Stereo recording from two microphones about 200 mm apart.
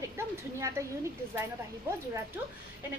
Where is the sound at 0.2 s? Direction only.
10° right (ahead or behind).